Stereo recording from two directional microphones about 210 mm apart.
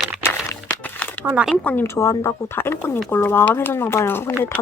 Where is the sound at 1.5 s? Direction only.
5° left (ahead or behind).